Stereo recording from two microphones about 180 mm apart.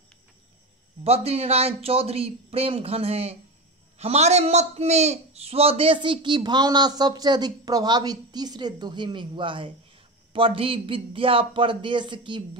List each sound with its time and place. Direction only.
1.0 s a man's voice: 35° right (ahead or behind)